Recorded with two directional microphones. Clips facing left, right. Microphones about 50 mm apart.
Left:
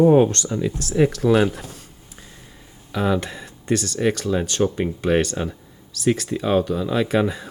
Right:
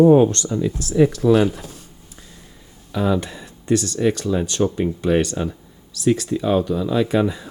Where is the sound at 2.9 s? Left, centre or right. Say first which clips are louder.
Right 1 dB; left.